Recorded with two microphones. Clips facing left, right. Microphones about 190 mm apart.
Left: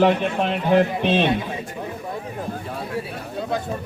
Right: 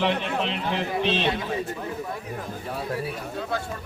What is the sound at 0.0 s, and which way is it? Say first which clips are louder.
A man's voice: left 7 dB; 50° left (ahead or behind).